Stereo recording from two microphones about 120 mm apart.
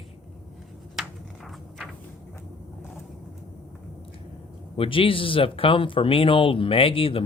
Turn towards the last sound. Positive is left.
turn(degrees=50)  # may be behind; listen again after turning